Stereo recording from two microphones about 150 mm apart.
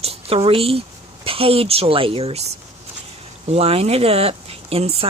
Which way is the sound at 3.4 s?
40° right (ahead or behind).